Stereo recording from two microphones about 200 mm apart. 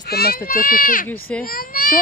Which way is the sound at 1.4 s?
45° left (ahead or behind).